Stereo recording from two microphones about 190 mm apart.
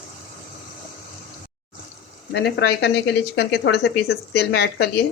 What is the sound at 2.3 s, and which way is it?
Speech, 60° left (ahead or behind).